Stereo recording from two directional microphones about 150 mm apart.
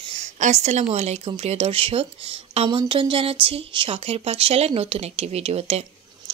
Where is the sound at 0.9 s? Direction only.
45° right (ahead or behind).